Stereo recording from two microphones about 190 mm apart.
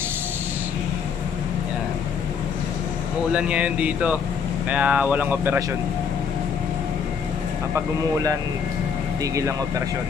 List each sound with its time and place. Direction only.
3.3 s speech: 5° right (ahead or behind)
7.7 s speech: 20° right (ahead or behind)